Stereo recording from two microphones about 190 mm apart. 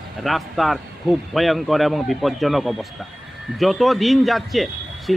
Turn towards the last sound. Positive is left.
turn(degrees=0)  # may be behind; listen again after turning